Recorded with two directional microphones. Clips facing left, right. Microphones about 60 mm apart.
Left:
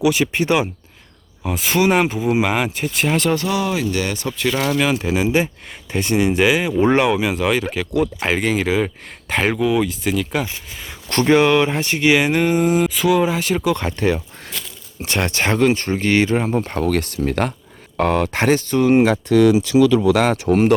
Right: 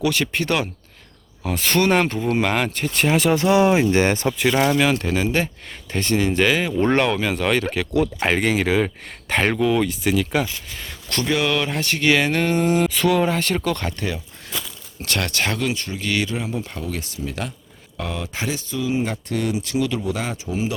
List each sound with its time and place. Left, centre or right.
0.0 s speech: centre
1.5 s speech: centre
3.3 s speech: right
4.4 s speech: centre
4.8 s speech: centre
11.1 s speech: left; by 13.9 s centre
15.0 s speech: left